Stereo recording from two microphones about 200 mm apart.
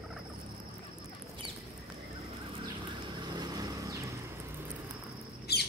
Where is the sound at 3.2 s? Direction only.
20° right (ahead or behind).